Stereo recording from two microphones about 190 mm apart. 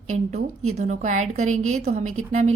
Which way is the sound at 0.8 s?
40° right (ahead or behind).